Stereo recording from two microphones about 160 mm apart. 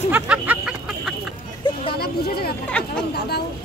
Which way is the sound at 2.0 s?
75° left (ahead or behind).